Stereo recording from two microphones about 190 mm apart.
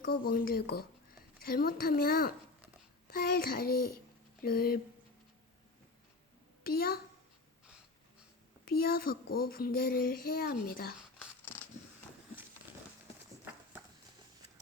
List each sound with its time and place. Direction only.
0.0 s speech: 50° left (ahead or behind)
6.7 s speech: 50° left (ahead or behind)
8.7 s speech: 50° left (ahead or behind)
11.4 s a sound: 10° left (ahead or behind)